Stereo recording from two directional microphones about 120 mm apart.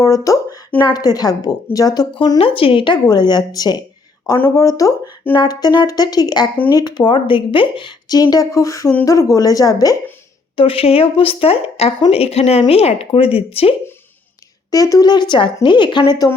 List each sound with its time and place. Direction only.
0.0 s a sound: 30° left (ahead or behind)
0.8 s speech: 35° left (ahead or behind)
10.6 s speech: 50° left (ahead or behind)
14.7 s speech: 30° left (ahead or behind)